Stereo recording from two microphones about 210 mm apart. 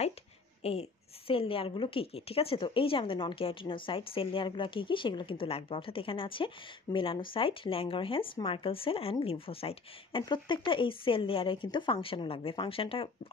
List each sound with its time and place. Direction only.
0.6 s a woman's voice: 30° left (ahead or behind)